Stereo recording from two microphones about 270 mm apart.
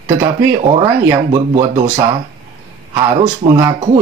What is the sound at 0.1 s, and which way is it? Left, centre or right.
Speech, centre.